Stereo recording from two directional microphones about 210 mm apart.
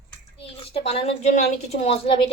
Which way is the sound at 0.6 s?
30° left (ahead or behind).